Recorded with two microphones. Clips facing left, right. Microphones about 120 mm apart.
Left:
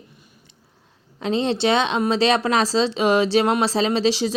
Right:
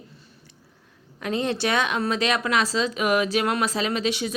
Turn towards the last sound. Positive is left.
turn(degrees=30)  # may be behind; listen again after turning